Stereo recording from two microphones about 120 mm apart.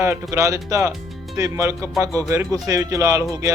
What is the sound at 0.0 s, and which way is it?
Speech, 20° right (ahead or behind).